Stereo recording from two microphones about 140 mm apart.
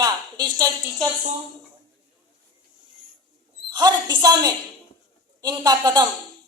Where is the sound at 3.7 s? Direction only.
30° right (ahead or behind).